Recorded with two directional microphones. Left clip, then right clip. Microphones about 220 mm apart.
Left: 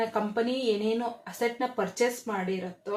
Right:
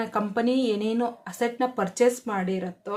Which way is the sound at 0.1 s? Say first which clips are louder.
Right 3 dB; 30° right (ahead or behind).